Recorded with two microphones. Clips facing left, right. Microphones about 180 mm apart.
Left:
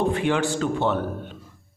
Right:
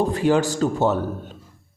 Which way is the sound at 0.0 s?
40° right (ahead or behind).